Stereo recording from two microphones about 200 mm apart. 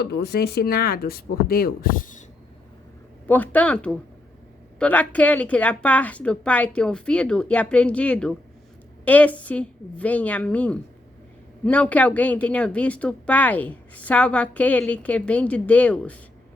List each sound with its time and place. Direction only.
0.0 s speech: 55° left (ahead or behind)
3.2 s a woman's voice: 10° left (ahead or behind)